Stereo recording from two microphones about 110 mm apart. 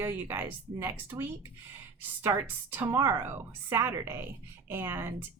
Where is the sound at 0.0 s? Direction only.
20° right (ahead or behind).